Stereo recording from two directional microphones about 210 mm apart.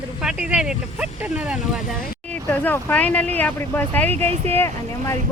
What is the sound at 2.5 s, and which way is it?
Speech, 10° left (ahead or behind).